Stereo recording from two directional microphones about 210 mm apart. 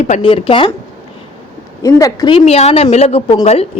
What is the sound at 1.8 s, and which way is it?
A woman's voice, 15° left (ahead or behind).